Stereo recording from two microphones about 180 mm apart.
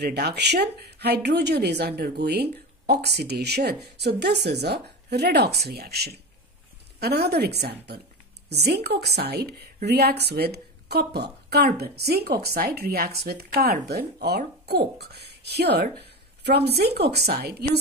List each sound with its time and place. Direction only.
0.0 s a woman's voice: 65° right (ahead or behind)